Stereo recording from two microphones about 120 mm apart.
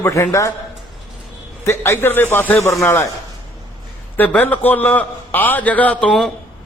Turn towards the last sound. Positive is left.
turn(degrees=5)  # may be behind; listen again after turning